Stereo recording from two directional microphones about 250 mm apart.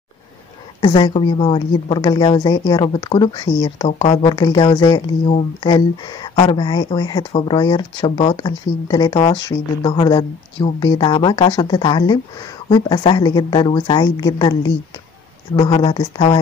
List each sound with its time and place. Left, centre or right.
0.7 s a woman's voice: centre